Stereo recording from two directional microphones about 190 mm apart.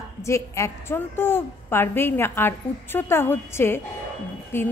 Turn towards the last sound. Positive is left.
turn(degrees=10)  # may be behind; listen again after turning